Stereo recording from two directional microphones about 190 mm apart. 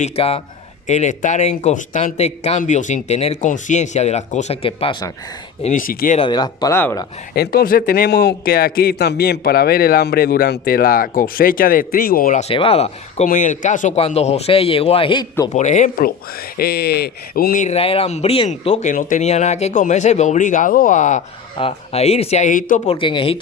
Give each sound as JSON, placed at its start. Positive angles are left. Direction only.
{"t": 0.0, "sound": "speech", "side_deg": 30}
{"t": 5.6, "sound": "a man's voice", "side_deg": 45}
{"t": 6.1, "sound": "speech", "side_deg": 25}
{"t": 7.3, "sound": "a man's voice", "side_deg": 55}
{"t": 15.5, "sound": "speech", "side_deg": 40}
{"t": 16.6, "sound": "speech", "side_deg": 55}
{"t": 23.0, "sound": "speech", "side_deg": 25}